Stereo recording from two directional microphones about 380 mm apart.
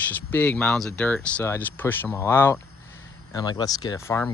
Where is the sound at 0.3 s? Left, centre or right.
Centre.